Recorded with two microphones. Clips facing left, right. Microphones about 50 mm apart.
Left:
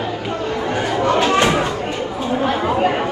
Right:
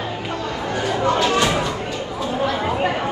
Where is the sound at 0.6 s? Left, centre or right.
Left.